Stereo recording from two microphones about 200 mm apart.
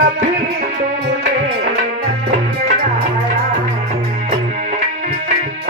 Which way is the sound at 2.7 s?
45° right (ahead or behind).